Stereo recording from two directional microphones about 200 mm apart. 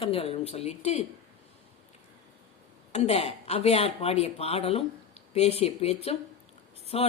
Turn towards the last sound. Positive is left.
turn(degrees=30)  # may be behind; listen again after turning